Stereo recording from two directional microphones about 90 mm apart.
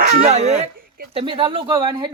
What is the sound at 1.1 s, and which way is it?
Speech, 70° right (ahead or behind).